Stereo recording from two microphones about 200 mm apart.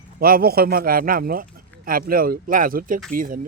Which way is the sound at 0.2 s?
45° right (ahead or behind).